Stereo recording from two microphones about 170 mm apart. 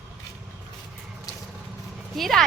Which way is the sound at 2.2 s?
Centre (ahead or behind).